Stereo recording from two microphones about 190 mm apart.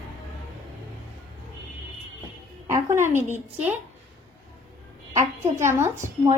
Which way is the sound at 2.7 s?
15° right (ahead or behind).